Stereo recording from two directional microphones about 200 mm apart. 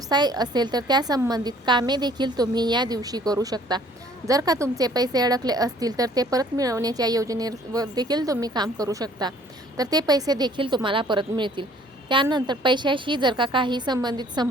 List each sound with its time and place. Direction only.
0.1 s a woman's voice: 20° right (ahead or behind)